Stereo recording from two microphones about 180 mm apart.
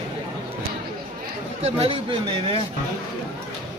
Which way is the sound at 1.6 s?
30° right (ahead or behind).